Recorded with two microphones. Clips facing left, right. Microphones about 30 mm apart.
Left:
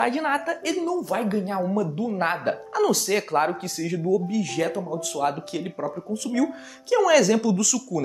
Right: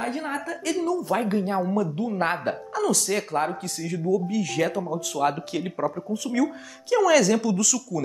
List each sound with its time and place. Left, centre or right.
0.0 s a woman's voice: left
0.9 s speech: centre
2.7 s speech: centre
4.0 s speech: centre
6.3 s speech: centre